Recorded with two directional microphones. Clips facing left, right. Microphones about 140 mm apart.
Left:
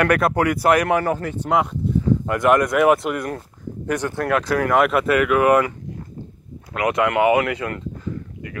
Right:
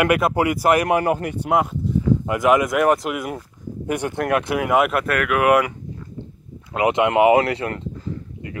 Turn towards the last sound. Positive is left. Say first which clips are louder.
# right 2 dB
turn(degrees=-30)  # may be behind; listen again after turning